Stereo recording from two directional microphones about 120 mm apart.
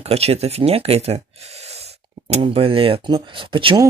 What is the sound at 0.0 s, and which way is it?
Speech, 60° right (ahead or behind).